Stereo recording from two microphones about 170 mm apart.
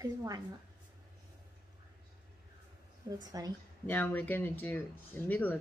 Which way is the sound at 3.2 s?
20° right (ahead or behind).